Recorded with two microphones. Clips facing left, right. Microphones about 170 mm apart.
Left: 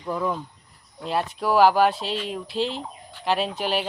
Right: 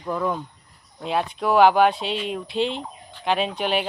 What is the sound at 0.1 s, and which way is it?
Speech, 5° left (ahead or behind).